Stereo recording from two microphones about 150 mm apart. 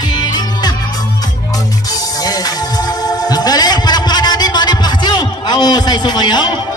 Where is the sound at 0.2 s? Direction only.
30° left (ahead or behind).